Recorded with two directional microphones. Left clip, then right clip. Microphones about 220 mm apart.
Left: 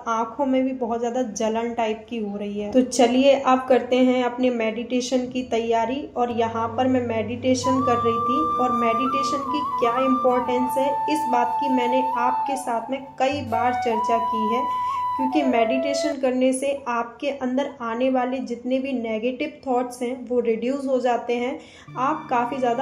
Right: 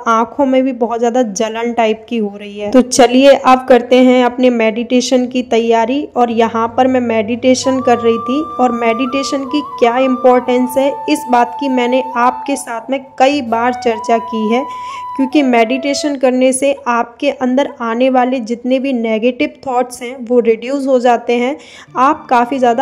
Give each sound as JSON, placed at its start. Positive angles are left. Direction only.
{"t": 0.0, "sound": "a woman's voice", "side_deg": -50}